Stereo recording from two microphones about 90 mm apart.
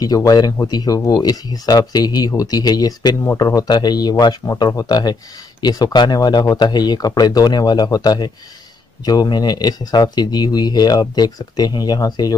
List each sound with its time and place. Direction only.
0.0 s speech: 45° left (ahead or behind)